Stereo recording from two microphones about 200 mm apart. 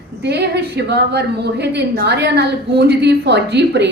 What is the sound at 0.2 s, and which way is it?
A woman's voice, 55° right (ahead or behind).